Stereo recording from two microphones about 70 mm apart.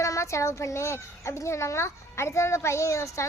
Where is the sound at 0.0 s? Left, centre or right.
Left.